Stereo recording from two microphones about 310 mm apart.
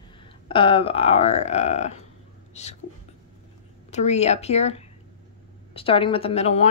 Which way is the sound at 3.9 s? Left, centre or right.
Left.